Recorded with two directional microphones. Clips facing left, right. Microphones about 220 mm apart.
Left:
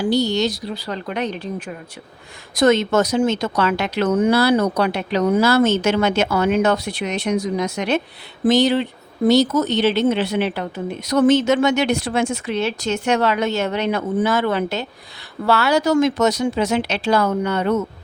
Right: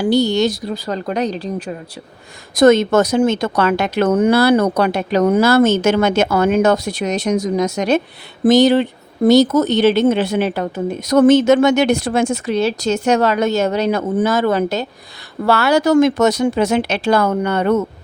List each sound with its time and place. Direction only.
0.1 s a woman's voice: 50° right (ahead or behind); by 1.7 s 35° right (ahead or behind)
2.6 s speech: 50° right (ahead or behind)